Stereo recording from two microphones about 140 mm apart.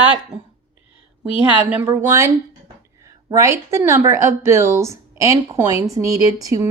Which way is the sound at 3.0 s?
20° right (ahead or behind).